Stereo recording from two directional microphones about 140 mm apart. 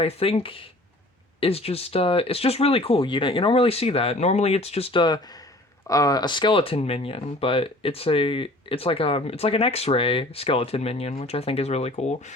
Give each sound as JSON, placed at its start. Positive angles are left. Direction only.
{"t": 0.0, "sound": "speech", "side_deg": 45}